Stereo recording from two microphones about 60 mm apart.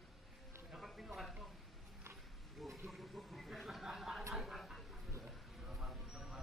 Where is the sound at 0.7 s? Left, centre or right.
Centre.